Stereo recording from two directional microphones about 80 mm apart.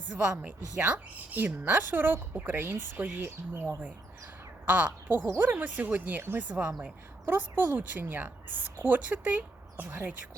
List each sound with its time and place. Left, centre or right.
0.1 s speech: centre